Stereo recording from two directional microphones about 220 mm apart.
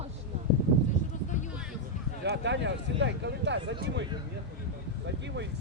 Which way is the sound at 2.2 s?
50° right (ahead or behind).